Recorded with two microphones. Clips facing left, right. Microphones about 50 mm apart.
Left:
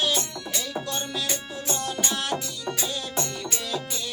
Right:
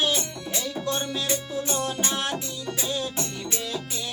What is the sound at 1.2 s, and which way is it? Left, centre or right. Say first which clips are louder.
Music: right 3 dB; centre.